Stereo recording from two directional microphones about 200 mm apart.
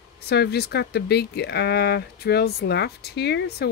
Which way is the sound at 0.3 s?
55° left (ahead or behind).